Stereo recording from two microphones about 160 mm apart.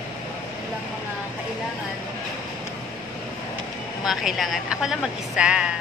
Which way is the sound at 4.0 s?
Centre (ahead or behind).